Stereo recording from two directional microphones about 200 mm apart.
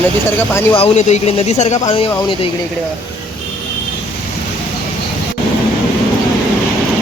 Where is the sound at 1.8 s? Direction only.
25° left (ahead or behind).